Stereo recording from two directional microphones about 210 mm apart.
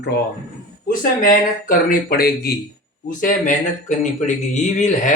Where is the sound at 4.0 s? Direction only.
35° left (ahead or behind).